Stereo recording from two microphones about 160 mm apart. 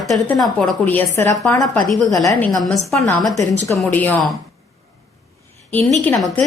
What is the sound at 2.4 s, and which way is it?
Speech, centre (ahead or behind).